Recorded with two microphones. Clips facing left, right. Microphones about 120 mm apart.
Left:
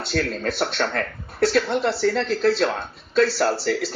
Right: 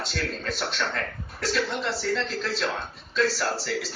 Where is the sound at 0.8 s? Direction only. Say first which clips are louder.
Left 5 dB; 40° left (ahead or behind).